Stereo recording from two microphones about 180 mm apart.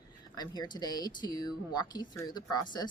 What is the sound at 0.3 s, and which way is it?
Speech, 25° left (ahead or behind).